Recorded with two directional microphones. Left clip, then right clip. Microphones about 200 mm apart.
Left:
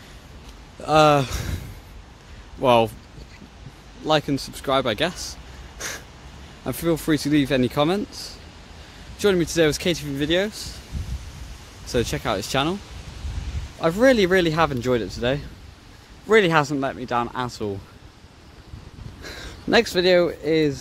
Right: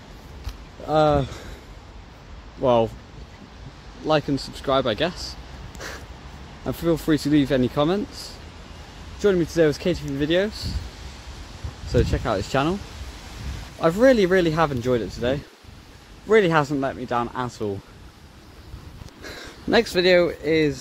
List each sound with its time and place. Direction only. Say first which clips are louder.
0.8 s speech: left 3 dB; 20° left (ahead or behind)
2.6 s speech: left 2 dB; 15° left (ahead or behind)
4.1 s speech: left 1 dB; 10° left (ahead or behind)
11.9 s speech: right 1 dB; 5° left (ahead or behind)
13.9 s speech: even; 5° left (ahead or behind)
19.2 s speech: even; 5° left (ahead or behind)